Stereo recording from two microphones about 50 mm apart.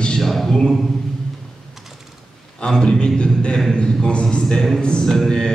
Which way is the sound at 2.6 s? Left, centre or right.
Centre.